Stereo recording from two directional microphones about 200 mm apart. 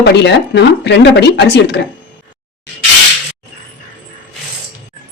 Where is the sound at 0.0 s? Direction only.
55° left (ahead or behind).